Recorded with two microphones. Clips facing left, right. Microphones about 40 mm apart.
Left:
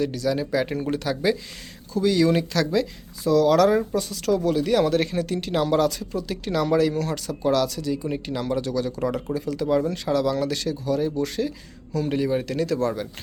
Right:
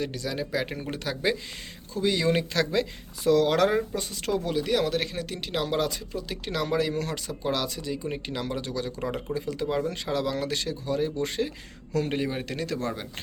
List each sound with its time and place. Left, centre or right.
0.0 s speech: centre
1.9 s speech: right
3.2 s speech: right
3.9 s speech: right